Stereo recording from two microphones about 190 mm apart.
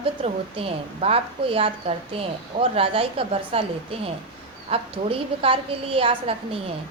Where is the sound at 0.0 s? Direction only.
30° right (ahead or behind).